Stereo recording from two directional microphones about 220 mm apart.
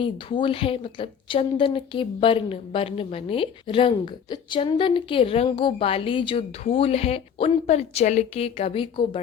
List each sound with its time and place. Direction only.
0.0 s a woman's voice: 20° left (ahead or behind)